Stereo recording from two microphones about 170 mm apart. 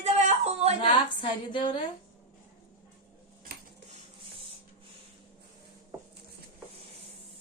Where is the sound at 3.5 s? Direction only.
65° right (ahead or behind).